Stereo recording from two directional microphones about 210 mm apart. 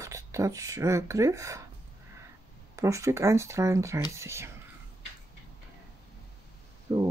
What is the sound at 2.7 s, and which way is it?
Speech, 15° right (ahead or behind).